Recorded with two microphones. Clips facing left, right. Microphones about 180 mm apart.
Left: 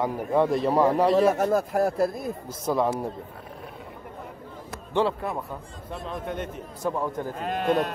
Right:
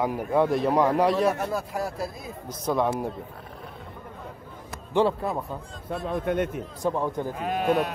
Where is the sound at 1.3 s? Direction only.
45° left (ahead or behind).